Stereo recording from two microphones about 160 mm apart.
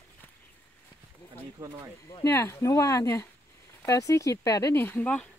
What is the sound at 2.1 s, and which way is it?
Speech, 20° left (ahead or behind).